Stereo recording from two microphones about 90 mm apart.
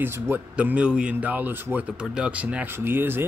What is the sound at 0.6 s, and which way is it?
Speech, 15° right (ahead or behind).